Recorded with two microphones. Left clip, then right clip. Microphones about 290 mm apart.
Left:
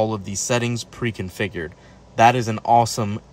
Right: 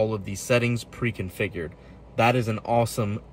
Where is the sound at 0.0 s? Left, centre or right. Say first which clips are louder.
Left 4 dB; centre.